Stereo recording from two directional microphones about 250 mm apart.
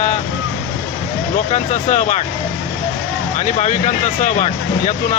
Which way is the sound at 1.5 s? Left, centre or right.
Left.